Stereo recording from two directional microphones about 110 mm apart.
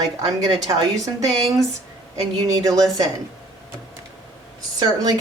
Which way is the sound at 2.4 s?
30° right (ahead or behind).